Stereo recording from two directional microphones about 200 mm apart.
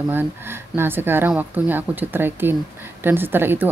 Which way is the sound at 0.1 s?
10° right (ahead or behind).